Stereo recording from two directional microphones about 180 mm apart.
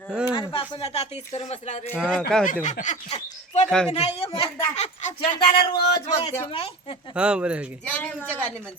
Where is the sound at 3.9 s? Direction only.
35° left (ahead or behind).